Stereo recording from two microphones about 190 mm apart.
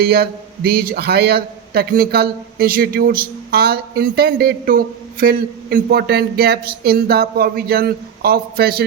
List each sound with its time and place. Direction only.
0.0 s a man's voice: 55° right (ahead or behind)